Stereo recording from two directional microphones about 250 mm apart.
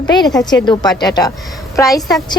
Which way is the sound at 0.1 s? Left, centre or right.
Centre.